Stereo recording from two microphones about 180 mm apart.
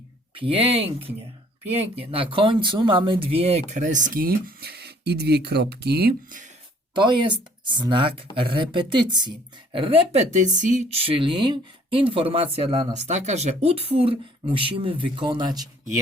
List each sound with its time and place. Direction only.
0.3 s speech: 30° right (ahead or behind); by 6.4 s 60° right (ahead or behind)
6.9 s speech: 25° right (ahead or behind)